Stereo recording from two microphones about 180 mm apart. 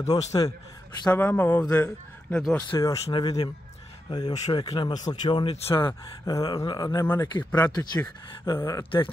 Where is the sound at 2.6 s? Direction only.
20° left (ahead or behind).